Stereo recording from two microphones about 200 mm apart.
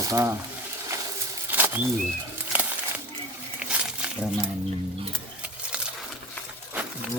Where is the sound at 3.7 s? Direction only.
5° right (ahead or behind).